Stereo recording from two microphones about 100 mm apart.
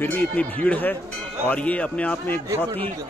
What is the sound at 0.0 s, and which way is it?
A man's voice, 15° left (ahead or behind).